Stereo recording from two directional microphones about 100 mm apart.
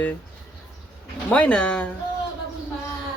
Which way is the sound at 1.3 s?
10° left (ahead or behind).